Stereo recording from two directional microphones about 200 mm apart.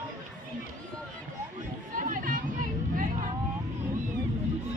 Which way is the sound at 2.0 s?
40° right (ahead or behind).